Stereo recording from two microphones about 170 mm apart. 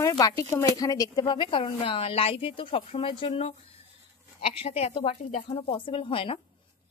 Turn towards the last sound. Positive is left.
turn(degrees=35)  # may be behind; listen again after turning